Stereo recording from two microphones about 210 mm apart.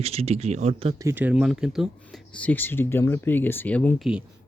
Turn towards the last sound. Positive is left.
turn(degrees=5)  # may be behind; listen again after turning